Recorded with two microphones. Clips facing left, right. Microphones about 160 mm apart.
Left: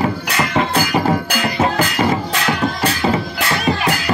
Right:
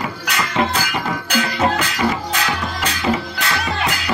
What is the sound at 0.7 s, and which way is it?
Music, 45° left (ahead or behind).